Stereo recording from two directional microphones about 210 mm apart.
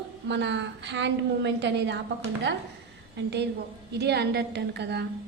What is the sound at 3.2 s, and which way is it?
A woman's voice, 55° right (ahead or behind).